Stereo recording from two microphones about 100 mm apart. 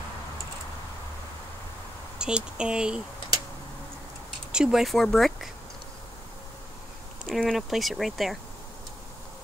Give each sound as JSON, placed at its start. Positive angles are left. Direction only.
{"t": 2.1, "sound": "speech", "side_deg": -10}
{"t": 4.5, "sound": "speech", "side_deg": -5}
{"t": 7.2, "sound": "speech", "side_deg": 0}